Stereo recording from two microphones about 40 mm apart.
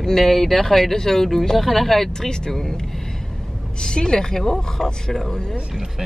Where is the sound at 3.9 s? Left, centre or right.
Centre.